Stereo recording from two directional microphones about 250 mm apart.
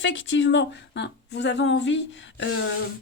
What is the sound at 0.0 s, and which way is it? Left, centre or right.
Speech, left.